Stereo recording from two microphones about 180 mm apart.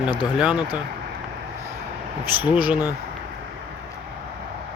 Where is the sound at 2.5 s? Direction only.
10° right (ahead or behind).